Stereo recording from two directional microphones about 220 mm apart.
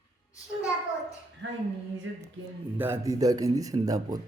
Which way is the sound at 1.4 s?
55° right (ahead or behind).